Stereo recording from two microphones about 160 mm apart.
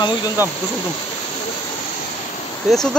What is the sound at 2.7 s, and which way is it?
Speech, 5° right (ahead or behind).